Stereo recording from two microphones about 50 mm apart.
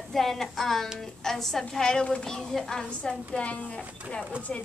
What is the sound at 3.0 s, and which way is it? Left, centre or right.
A woman's voice, left.